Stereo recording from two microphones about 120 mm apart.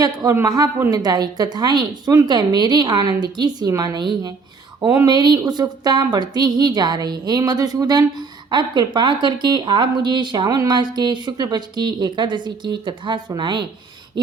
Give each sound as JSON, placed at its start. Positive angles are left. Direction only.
{"t": 0.0, "sound": "speech", "side_deg": -30}